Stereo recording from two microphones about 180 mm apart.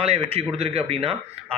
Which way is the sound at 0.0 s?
35° right (ahead or behind).